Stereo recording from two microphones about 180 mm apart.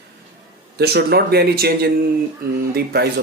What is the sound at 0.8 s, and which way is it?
Speech, 60° right (ahead or behind).